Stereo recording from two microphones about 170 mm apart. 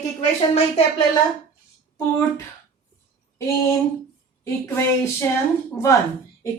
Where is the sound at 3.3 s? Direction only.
15° left (ahead or behind).